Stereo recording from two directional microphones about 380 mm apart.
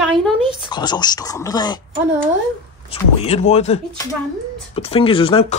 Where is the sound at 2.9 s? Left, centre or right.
Centre.